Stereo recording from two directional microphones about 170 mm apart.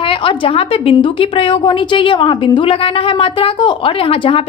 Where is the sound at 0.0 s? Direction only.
30° left (ahead or behind).